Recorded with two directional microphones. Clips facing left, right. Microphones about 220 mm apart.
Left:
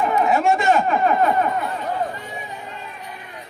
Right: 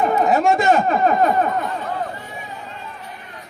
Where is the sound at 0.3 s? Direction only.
40° right (ahead or behind).